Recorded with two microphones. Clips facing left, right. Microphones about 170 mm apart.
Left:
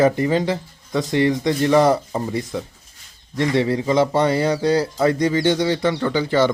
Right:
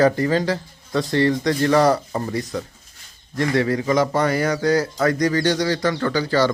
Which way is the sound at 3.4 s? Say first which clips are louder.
Left 1 dB; 25° left (ahead or behind).